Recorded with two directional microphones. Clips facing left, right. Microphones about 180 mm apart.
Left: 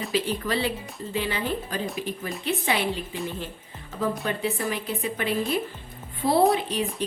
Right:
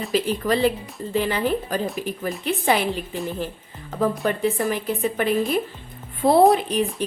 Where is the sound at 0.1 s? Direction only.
45° right (ahead or behind).